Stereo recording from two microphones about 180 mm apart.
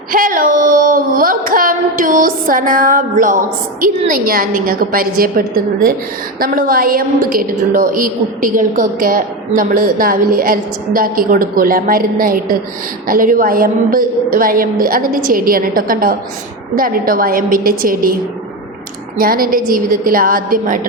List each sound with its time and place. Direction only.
0.1 s a woman's voice: 50° right (ahead or behind)
6.4 s a woman's voice: 50° right (ahead or behind)
19.2 s a woman's voice: 55° right (ahead or behind)